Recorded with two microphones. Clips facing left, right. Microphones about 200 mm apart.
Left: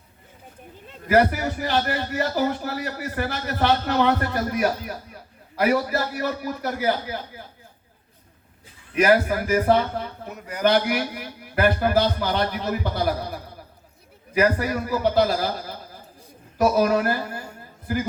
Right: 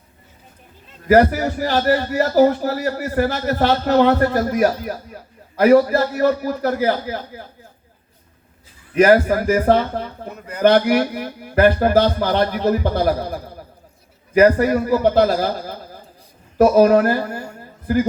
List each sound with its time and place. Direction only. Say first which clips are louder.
1.0 s a man's voice: right 5 dB; 40° right (ahead or behind)
9.0 s a man's voice: right 6 dB; 45° right (ahead or behind)
16.7 s a man's voice: right 9 dB; 45° right (ahead or behind)